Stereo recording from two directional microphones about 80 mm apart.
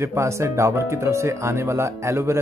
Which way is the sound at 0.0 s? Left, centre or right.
Right.